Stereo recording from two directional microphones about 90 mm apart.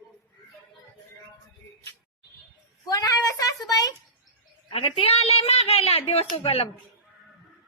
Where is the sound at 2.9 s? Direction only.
45° left (ahead or behind).